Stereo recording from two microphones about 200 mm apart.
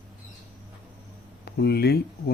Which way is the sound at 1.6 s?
55° left (ahead or behind).